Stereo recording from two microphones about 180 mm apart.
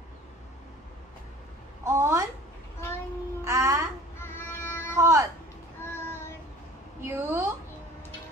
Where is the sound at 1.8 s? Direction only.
15° right (ahead or behind).